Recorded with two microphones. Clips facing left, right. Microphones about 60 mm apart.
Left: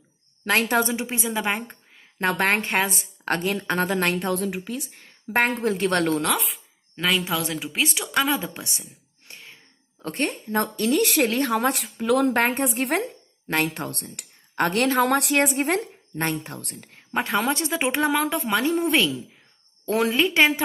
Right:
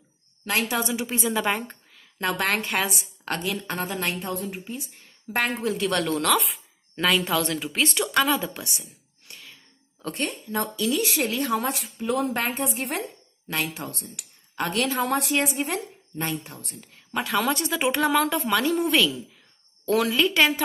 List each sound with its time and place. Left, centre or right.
0.5 s a woman's voice: left
0.9 s speech: left
2.0 s a woman's voice: left
6.2 s a woman's voice: centre
9.3 s a sound: left
10.0 s a woman's voice: left
17.1 s speech: left